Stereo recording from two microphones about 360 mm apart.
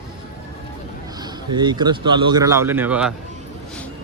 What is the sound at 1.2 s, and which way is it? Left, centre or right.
Speech, centre.